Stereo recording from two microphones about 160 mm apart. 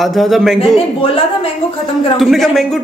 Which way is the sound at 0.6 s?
35° left (ahead or behind).